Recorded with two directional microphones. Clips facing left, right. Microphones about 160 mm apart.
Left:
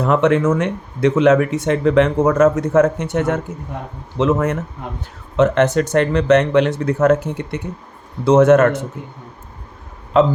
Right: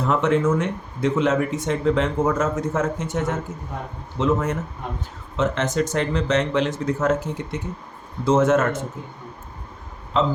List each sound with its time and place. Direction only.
0.0 s speech: 65° left (ahead or behind)
10.1 s speech: 60° left (ahead or behind)